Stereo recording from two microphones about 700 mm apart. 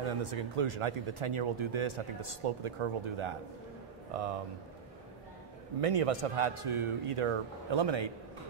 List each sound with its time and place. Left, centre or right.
0.0 s speech: right
5.8 s speech: right